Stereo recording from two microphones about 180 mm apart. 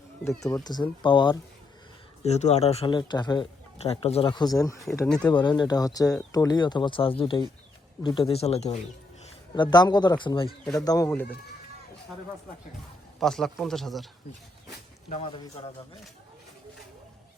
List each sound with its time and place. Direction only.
0.3 s speech: 15° left (ahead or behind)
2.2 s speech: 35° left (ahead or behind); by 4.8 s 20° left (ahead or behind)
5.0 s a man's voice: 5° left (ahead or behind)
5.3 s speech: 25° left (ahead or behind)
9.6 s speech: 25° left (ahead or behind)
13.1 s a man's voice: centre (ahead or behind)
15.1 s speech: 30° left (ahead or behind)